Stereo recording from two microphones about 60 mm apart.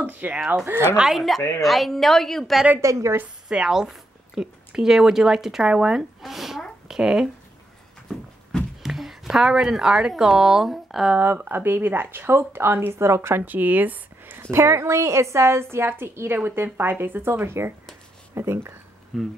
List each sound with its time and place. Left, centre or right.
0.0 s speech: right
1.1 s a woman's voice: centre
2.8 s a woman's voice: right
3.4 s a woman's voice: centre
8.8 s speech: centre
11.1 s speech: right
13.5 s speech: right
14.4 s a woman's voice: right
19.1 s a woman's voice: centre